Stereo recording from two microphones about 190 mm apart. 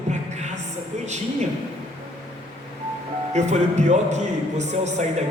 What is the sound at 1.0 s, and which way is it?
Speech, 40° right (ahead or behind).